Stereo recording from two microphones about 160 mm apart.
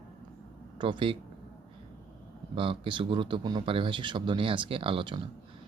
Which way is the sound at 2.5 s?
35° right (ahead or behind).